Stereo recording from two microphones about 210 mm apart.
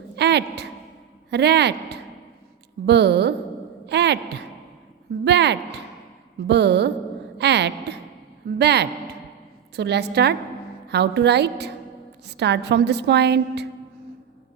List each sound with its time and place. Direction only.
0.2 s a sound: 55° right (ahead or behind)
1.3 s a woman's voice: 55° right (ahead or behind)
5.2 s a woman's voice: 55° right (ahead or behind)